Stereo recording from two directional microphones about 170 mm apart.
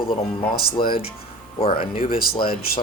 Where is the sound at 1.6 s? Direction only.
35° left (ahead or behind).